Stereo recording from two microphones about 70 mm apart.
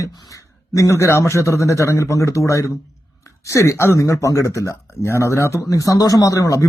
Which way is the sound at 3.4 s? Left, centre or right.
Left.